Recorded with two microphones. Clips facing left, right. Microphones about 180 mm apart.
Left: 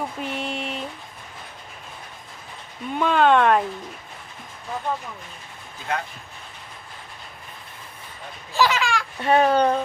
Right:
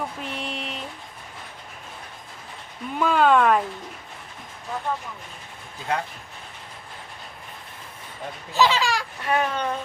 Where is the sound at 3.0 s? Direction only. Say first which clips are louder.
Left 1 dB; 5° right (ahead or behind).